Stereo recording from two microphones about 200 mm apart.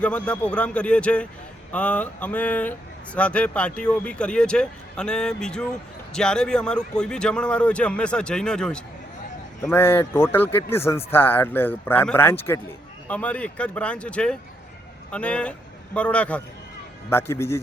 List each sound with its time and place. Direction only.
0.0 s a man's voice: 5° left (ahead or behind)